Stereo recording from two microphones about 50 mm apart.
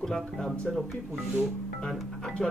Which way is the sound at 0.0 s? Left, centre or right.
Centre.